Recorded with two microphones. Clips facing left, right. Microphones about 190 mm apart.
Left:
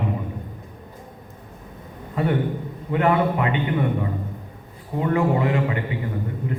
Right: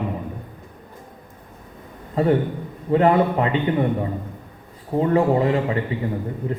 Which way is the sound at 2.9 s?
35° right (ahead or behind).